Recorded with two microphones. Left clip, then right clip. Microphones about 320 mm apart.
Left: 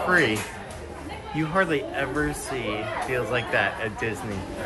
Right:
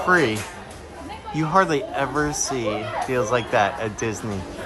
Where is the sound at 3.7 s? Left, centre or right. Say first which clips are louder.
Right 2 dB; right.